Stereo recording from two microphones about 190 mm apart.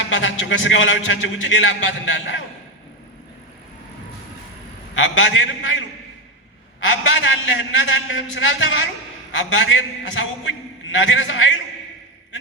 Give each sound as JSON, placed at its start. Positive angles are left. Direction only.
{"t": 0.1, "sound": "a man's voice", "side_deg": 90}
{"t": 4.9, "sound": "a man's voice", "side_deg": 85}
{"t": 6.7, "sound": "a man's voice", "side_deg": 90}
{"t": 10.9, "sound": "a man's voice", "side_deg": 80}